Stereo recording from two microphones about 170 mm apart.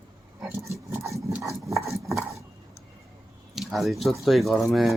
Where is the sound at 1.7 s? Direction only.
Centre (ahead or behind).